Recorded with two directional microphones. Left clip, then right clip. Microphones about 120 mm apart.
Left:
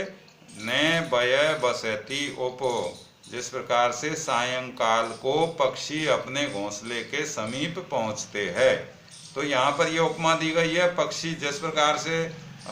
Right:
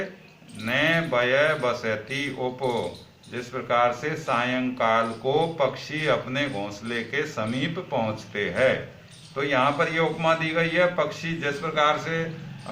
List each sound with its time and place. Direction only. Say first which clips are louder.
0.6 s speech: right 1 dB; 40° left (ahead or behind)